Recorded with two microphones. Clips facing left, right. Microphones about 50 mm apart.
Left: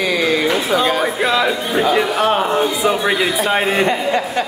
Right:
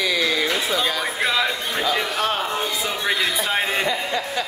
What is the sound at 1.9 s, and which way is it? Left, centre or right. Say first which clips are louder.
A man's voice: left 7 dB; left.